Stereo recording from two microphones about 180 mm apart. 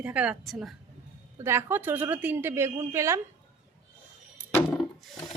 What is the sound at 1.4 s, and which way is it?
A woman's voice, 15° right (ahead or behind).